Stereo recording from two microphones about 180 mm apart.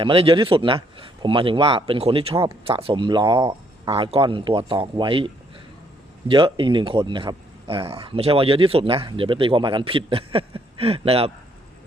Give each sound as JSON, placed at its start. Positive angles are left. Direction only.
{"t": 0.0, "sound": "speech", "side_deg": -30}